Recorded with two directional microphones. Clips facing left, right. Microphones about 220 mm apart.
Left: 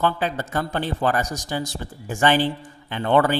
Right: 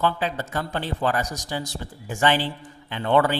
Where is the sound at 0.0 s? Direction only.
45° left (ahead or behind).